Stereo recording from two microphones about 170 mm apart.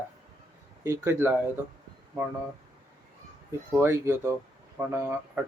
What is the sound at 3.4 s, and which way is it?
Speech, 15° right (ahead or behind).